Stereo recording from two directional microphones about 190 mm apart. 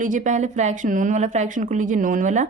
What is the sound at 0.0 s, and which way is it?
Speech, 45° right (ahead or behind).